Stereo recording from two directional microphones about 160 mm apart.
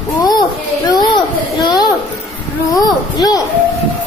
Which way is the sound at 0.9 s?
25° left (ahead or behind).